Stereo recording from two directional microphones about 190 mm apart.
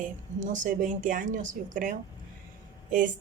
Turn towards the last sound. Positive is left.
turn(degrees=-45)  # may be behind; listen again after turning